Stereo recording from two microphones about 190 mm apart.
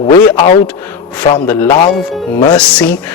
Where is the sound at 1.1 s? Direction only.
10° left (ahead or behind).